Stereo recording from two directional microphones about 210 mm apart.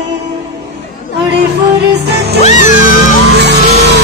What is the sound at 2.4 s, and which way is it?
Music, 35° left (ahead or behind).